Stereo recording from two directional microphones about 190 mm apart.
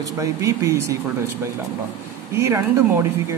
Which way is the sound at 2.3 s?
15° right (ahead or behind).